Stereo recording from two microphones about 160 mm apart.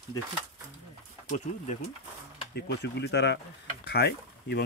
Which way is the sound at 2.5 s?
90° left.